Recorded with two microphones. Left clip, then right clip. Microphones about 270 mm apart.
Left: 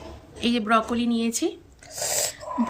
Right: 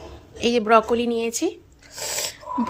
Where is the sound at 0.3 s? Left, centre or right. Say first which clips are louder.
Right 5 dB; centre.